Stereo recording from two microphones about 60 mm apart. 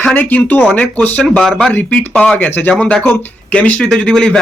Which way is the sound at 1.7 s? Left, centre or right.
Left.